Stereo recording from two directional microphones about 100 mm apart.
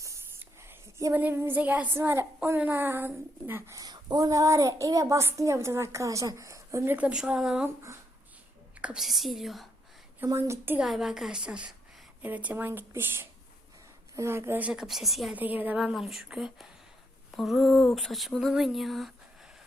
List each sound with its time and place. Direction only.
0.0 s whispering: 30° right (ahead or behind)
1.1 s speech: 20° right (ahead or behind)
3.8 s a woman's voice: 45° right (ahead or behind)
6.9 s a woman's voice: 10° right (ahead or behind)
8.8 s speech: 5° right (ahead or behind)
10.2 s speech: 30° right (ahead or behind)
10.8 s a woman's voice: 5° right (ahead or behind); by 14.6 s 25° right (ahead or behind)
14.6 s speech: 5° right (ahead or behind)
15.4 s a woman's voice: 15° right (ahead or behind)
15.8 s speech: 5° right (ahead or behind)